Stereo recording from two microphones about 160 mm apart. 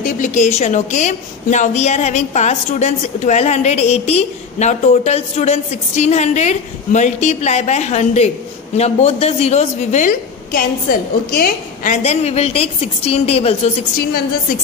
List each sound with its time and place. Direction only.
0.0 s a woman's voice: 50° left (ahead or behind)
12.0 s a woman's voice: 40° left (ahead or behind)